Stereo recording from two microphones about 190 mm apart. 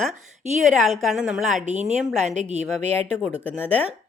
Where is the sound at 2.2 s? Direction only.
35° right (ahead or behind).